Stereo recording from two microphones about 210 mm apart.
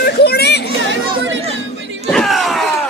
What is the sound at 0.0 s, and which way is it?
Children playing, 50° left (ahead or behind).